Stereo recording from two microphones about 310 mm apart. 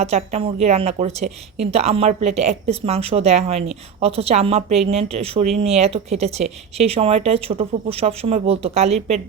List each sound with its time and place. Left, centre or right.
0.0 s speech: right